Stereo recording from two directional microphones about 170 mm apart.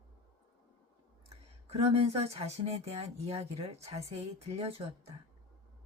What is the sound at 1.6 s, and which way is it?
Speech, 35° right (ahead or behind).